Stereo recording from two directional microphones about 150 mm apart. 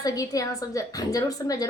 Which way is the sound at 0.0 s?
25° left (ahead or behind).